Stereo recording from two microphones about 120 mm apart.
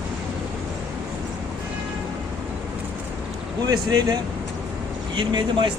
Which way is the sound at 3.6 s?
30° right (ahead or behind).